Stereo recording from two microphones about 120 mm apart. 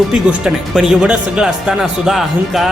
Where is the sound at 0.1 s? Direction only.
5° right (ahead or behind).